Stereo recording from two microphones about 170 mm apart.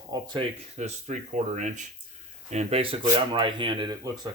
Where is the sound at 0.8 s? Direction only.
45° right (ahead or behind).